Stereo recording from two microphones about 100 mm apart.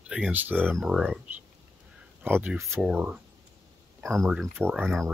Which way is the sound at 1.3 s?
20° right (ahead or behind).